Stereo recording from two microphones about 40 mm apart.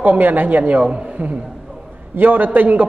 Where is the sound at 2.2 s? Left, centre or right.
Right.